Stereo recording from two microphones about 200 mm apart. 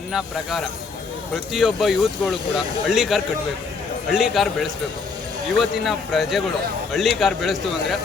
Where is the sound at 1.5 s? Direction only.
Centre (ahead or behind).